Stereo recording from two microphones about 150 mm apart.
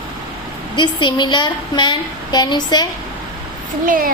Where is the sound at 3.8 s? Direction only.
70° right (ahead or behind).